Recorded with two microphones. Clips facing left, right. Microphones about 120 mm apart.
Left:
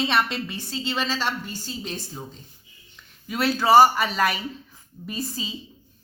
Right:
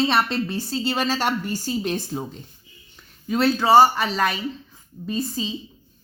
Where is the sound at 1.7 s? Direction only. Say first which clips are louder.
Right 9 dB; 60° right (ahead or behind).